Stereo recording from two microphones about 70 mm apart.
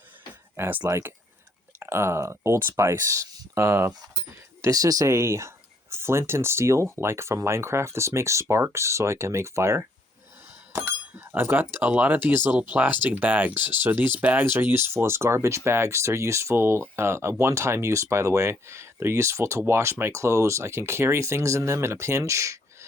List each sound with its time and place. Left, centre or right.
0.9 s speech: right
4.6 s speech: right
10.7 s bicycle bell: right
11.7 s speech: right